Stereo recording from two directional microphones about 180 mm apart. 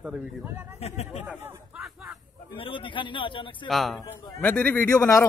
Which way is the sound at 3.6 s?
Centre (ahead or behind).